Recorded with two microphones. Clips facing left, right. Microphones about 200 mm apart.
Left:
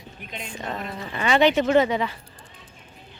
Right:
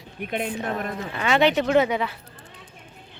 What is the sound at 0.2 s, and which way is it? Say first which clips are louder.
Speech: right 9 dB; 60° right (ahead or behind).